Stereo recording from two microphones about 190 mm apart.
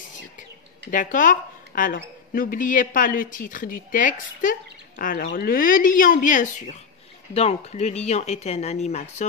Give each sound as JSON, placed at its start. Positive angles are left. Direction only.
{"t": 0.9, "sound": "speech", "side_deg": 45}
{"t": 7.3, "sound": "speech", "side_deg": 35}